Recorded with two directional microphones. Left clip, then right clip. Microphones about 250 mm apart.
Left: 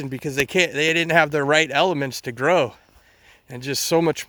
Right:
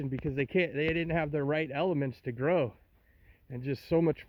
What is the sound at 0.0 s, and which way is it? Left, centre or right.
Speech, centre.